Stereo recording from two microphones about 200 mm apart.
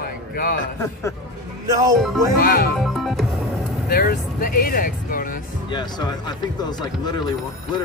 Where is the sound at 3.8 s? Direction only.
50° left (ahead or behind).